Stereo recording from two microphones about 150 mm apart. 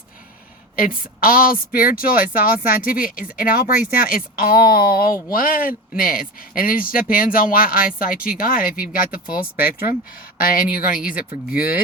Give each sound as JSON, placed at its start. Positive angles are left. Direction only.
{"t": 0.8, "sound": "speech", "side_deg": 70}
{"t": 5.3, "sound": "speech", "side_deg": 70}
{"t": 9.6, "sound": "speech", "side_deg": 90}
{"t": 10.3, "sound": "speech", "side_deg": 75}